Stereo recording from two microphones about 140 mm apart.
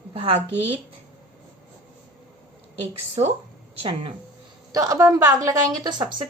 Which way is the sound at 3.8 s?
40° right (ahead or behind).